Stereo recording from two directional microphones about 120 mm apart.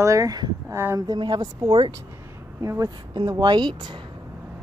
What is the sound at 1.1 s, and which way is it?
Speech, 35° right (ahead or behind).